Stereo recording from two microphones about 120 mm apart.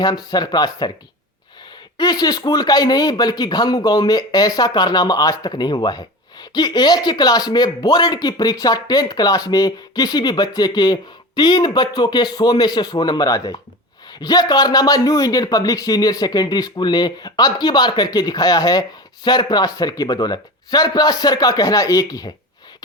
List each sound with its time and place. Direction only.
0.0 s speech: 35° left (ahead or behind)
2.0 s speech: 35° left (ahead or behind)